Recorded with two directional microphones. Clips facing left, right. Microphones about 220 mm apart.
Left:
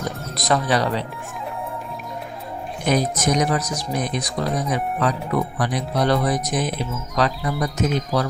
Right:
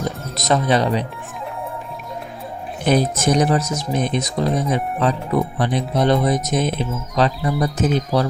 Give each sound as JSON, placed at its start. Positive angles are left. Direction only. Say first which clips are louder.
{"t": 0.3, "sound": "speech", "louder": "right 3 dB", "side_deg": -20}
{"t": 2.8, "sound": "speech", "louder": "right 3 dB", "side_deg": -30}